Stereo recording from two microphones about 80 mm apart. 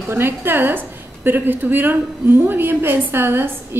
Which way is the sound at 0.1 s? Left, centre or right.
Right.